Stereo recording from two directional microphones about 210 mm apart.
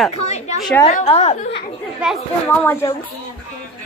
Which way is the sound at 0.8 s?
30° left (ahead or behind).